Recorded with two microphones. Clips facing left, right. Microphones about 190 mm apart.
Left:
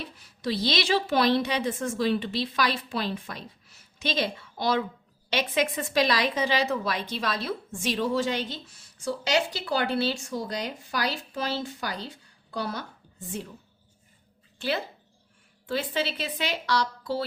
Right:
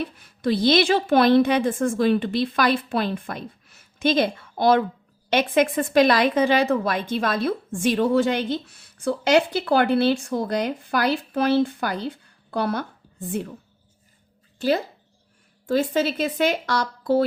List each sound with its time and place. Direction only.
0.0 s a woman's voice: 55° right (ahead or behind)
15.6 s a woman's voice: 45° right (ahead or behind)